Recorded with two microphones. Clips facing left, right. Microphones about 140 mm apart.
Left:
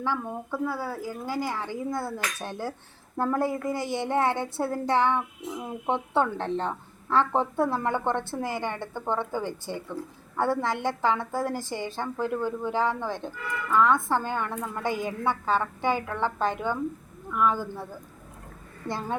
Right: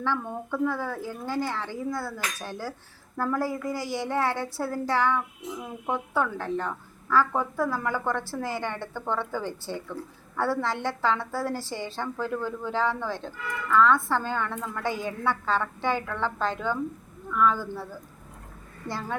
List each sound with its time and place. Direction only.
0.0 s a woman's voice: 10° left (ahead or behind)
18.9 s a child's voice: 20° left (ahead or behind)